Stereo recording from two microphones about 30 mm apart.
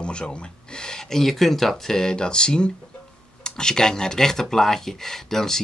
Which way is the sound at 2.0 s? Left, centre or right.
Left.